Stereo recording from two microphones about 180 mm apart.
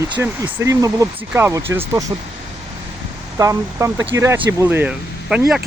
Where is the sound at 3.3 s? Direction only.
20° right (ahead or behind).